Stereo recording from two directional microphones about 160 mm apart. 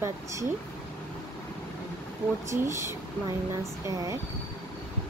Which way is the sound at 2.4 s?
20° right (ahead or behind).